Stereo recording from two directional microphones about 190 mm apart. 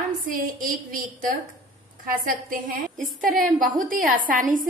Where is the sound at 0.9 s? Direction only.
45° right (ahead or behind).